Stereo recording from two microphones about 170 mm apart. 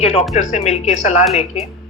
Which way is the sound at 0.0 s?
40° left (ahead or behind).